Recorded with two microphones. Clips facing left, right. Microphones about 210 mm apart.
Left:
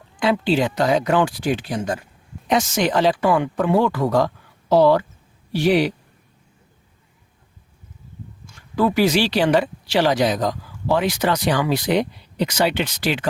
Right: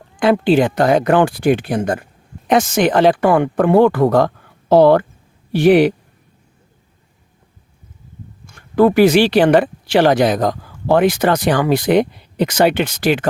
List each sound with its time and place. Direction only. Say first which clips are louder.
0.2 s a man's voice: right 6 dB; 55° right (ahead or behind)
8.4 s speech: right 7 dB; 55° right (ahead or behind)